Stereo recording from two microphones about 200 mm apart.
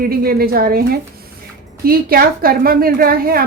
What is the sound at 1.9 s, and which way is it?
A woman's voice, 50° right (ahead or behind).